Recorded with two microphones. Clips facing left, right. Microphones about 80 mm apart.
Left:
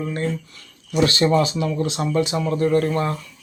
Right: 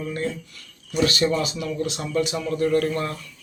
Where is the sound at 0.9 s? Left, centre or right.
Left.